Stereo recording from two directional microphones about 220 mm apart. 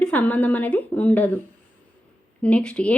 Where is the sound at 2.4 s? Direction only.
5° left (ahead or behind).